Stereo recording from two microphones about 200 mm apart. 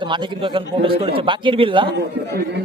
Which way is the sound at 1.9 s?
55° right (ahead or behind).